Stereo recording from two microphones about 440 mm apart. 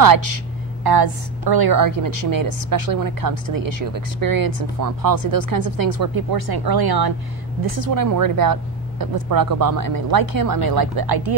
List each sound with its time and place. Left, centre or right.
0.8 s a woman's voice: right